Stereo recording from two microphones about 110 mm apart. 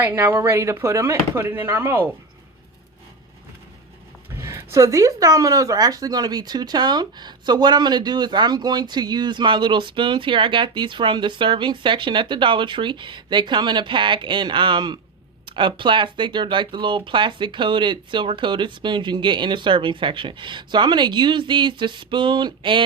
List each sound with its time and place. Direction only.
0.0 s speech: 15° right (ahead or behind)
4.4 s speech: 25° right (ahead or behind); by 22.8 s 45° right (ahead or behind)